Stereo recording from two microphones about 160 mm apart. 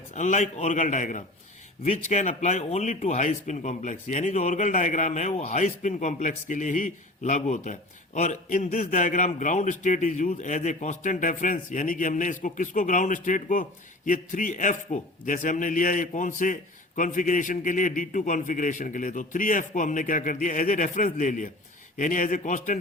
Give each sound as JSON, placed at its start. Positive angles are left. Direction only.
{"t": 0.1, "sound": "speech", "side_deg": 50}